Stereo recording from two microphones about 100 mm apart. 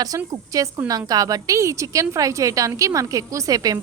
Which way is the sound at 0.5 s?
35° right (ahead or behind).